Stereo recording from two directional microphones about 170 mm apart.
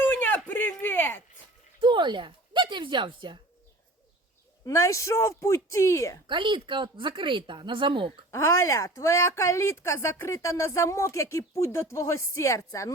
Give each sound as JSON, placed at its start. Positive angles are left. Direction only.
{"t": 0.0, "sound": "a sound", "side_deg": 10}
{"t": 1.8, "sound": "a woman's voice", "side_deg": -25}
{"t": 4.6, "sound": "a woman's voice", "side_deg": 20}
{"t": 6.2, "sound": "speech", "side_deg": -30}
{"t": 8.3, "sound": "a woman's voice", "side_deg": 15}